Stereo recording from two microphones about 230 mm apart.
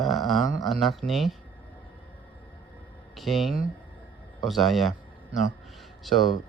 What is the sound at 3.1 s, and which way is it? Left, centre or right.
Speech, centre.